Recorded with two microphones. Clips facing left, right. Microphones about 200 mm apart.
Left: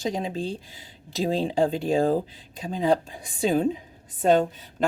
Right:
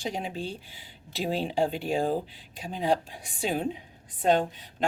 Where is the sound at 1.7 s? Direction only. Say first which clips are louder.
Left 5 dB; 45° left (ahead or behind).